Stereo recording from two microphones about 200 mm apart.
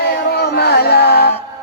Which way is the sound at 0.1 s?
50° left (ahead or behind).